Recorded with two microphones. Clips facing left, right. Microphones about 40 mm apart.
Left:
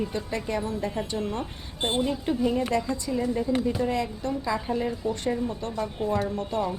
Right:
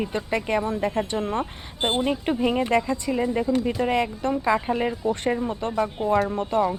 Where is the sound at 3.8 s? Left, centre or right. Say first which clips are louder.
Right 4 dB; right.